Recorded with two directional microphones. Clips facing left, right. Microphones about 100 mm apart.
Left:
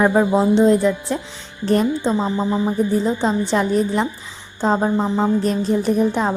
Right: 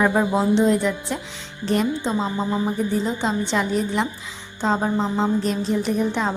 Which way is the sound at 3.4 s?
40° left (ahead or behind).